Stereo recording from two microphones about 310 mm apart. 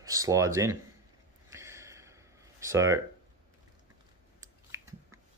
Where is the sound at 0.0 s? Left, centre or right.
Centre.